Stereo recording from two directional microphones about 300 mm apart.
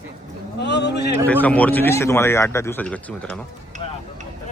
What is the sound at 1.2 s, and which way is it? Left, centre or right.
A man's voice, centre.